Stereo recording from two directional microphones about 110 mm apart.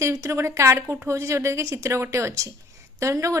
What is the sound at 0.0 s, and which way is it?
A woman's voice, 25° right (ahead or behind).